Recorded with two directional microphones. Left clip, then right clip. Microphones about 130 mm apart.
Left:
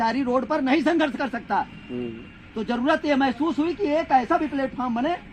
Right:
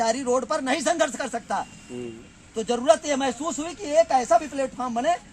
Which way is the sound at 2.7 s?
30° right (ahead or behind).